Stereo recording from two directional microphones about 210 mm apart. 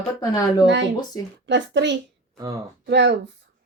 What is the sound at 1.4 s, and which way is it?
A woman's voice, 55° right (ahead or behind).